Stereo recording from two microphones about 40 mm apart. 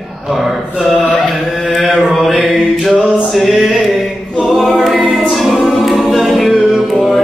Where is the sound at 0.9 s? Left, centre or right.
Left.